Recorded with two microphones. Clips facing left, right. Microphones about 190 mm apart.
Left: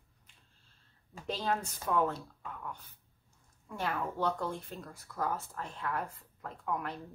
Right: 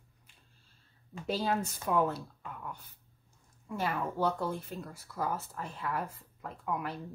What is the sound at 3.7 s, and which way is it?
Speech, 5° right (ahead or behind).